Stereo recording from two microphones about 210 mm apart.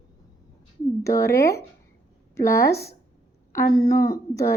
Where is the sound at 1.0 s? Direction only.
15° left (ahead or behind).